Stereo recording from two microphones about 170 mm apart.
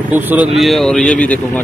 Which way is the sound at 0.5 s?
Centre (ahead or behind).